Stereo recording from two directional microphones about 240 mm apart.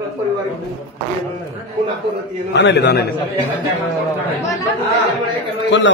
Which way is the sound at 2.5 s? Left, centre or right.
Left.